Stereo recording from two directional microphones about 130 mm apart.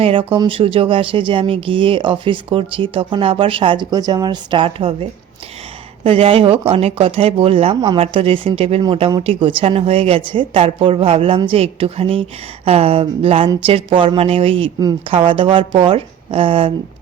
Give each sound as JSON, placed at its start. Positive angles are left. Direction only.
{"t": 0.0, "sound": "a woman's voice", "side_deg": -45}
{"t": 8.8, "sound": "a woman's voice", "side_deg": -35}